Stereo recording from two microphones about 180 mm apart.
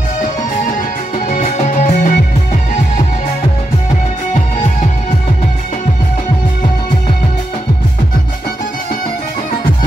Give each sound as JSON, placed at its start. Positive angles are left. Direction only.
{"t": 0.7, "sound": "music", "side_deg": 45}